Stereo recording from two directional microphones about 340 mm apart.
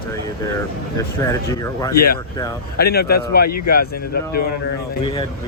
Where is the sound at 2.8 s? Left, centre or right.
Left.